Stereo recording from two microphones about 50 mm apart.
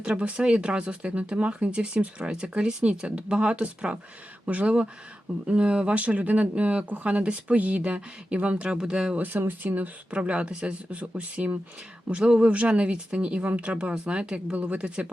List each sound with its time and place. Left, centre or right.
0.0 s speech: right
9.1 s speech: right
13.4 s speech: right
13.7 s speech: right